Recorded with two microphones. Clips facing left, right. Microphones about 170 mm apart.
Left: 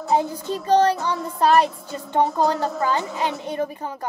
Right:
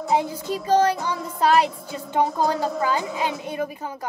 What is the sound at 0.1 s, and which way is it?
A woman's voice, 10° right (ahead or behind).